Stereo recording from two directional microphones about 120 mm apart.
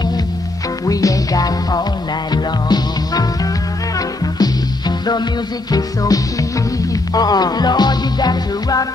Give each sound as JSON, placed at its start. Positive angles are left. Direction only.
{"t": 0.8, "sound": "music", "side_deg": 30}
{"t": 4.4, "sound": "music", "side_deg": 35}